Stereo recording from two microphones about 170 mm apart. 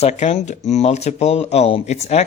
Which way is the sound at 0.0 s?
40° left (ahead or behind).